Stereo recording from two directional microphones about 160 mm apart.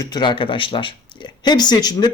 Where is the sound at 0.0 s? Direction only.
25° left (ahead or behind).